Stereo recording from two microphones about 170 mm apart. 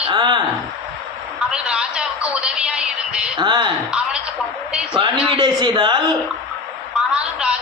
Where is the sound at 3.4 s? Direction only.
30° right (ahead or behind).